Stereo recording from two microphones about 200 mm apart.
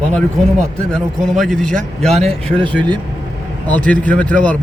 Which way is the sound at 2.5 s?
25° right (ahead or behind).